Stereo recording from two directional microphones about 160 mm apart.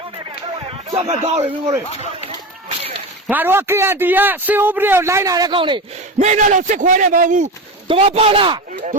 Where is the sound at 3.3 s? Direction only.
10° right (ahead or behind); by 6.2 s 30° right (ahead or behind).